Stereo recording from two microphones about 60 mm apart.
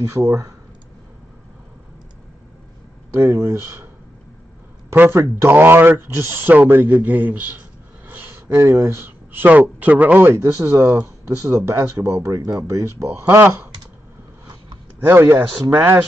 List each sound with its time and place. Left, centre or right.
0.0 s speech: right
3.1 s speech: right
5.1 s speech: right
5.5 s speech: right
8.1 s a sound: right
8.8 s speech: right
10.3 s speech: right
15.0 s speech: right